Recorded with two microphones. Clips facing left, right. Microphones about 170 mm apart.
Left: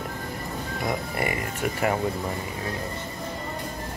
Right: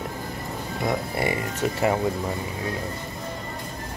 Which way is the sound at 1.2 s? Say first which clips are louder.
Right 2 dB; 25° right (ahead or behind).